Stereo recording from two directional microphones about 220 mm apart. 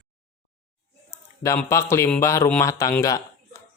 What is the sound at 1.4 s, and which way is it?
Speech, 15° left (ahead or behind).